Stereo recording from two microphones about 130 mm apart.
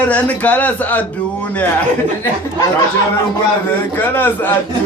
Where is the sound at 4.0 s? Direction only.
15° left (ahead or behind).